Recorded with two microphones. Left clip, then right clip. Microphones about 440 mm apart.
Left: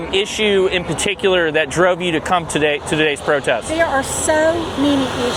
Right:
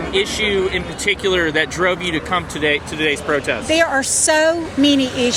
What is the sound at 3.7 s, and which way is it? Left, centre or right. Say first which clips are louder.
A woman's voice: right 1 dB; right.